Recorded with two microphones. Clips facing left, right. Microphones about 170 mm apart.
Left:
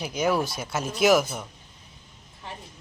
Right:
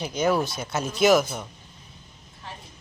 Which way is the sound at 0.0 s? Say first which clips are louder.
Right 1 dB; 5° left (ahead or behind).